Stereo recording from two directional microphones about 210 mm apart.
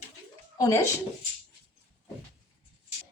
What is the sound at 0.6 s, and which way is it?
Speech, 15° left (ahead or behind).